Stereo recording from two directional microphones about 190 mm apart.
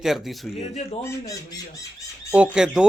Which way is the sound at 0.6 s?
35° left (ahead or behind).